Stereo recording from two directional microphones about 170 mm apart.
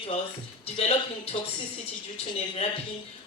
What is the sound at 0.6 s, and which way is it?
A man's voice, 35° left (ahead or behind).